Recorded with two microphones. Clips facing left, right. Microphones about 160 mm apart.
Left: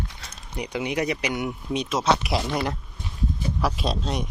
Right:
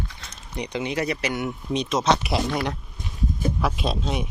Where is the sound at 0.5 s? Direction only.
5° left (ahead or behind).